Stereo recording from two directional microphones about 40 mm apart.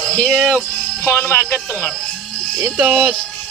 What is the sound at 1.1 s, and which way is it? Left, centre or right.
Speech, left.